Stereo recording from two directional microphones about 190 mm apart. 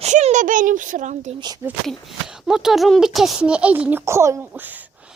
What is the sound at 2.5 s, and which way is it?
A child's voice, centre (ahead or behind).